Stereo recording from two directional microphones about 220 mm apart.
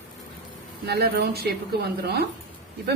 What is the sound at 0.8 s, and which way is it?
A woman's voice, 45° right (ahead or behind).